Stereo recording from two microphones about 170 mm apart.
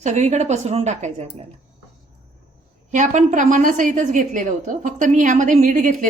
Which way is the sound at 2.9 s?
45° right (ahead or behind).